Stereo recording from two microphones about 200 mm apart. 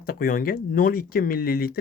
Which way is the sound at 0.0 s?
45° left (ahead or behind).